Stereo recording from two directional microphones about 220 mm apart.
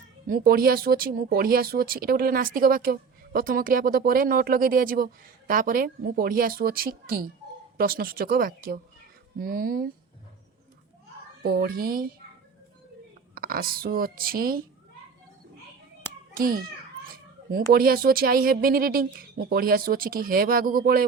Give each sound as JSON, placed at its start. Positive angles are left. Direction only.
{"t": 0.3, "sound": "speech", "side_deg": -45}
{"t": 11.4, "sound": "speech", "side_deg": -45}
{"t": 13.3, "sound": "speech", "side_deg": -40}
{"t": 16.3, "sound": "a child's voice", "side_deg": -40}